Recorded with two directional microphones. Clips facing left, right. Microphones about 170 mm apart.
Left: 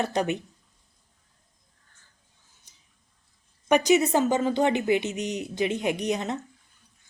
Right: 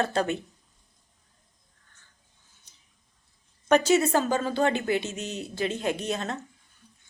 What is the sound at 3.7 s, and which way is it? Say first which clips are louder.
A woman's voice: left 1 dB; 15° left (ahead or behind).